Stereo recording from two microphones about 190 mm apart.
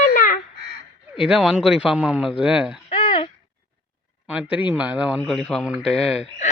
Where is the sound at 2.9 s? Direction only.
30° left (ahead or behind).